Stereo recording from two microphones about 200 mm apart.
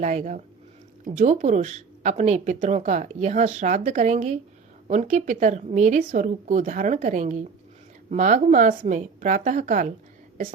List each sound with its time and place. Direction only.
0.0 s speech: 35° right (ahead or behind)